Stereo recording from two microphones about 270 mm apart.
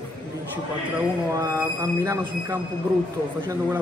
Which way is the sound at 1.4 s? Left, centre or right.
Centre.